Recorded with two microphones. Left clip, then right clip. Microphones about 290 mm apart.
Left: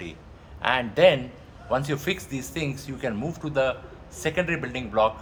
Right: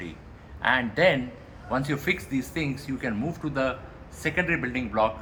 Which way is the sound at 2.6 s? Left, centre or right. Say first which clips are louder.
Even; left.